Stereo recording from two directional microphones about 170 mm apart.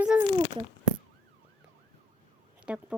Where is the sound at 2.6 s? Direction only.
5° right (ahead or behind).